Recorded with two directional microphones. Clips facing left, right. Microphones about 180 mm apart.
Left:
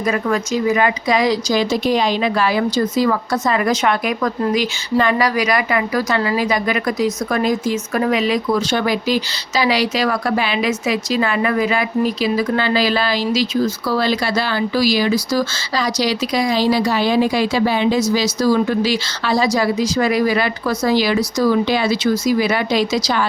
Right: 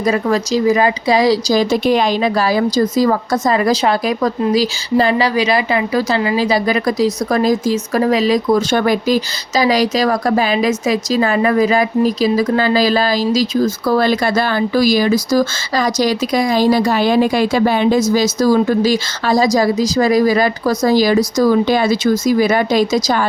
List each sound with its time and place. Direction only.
0.0 s speech: 35° right (ahead or behind)
1.7 s speech: 55° right (ahead or behind)
2.2 s speech: 40° right (ahead or behind)